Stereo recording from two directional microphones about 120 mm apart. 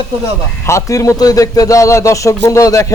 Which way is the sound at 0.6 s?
25° left (ahead or behind).